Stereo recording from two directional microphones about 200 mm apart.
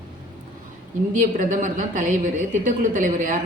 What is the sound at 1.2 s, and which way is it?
Speech, 40° right (ahead or behind).